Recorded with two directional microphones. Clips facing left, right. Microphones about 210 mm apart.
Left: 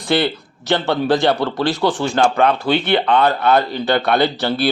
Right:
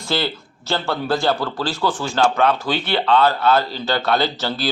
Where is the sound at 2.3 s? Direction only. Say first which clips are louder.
Left 2 dB; 10° left (ahead or behind).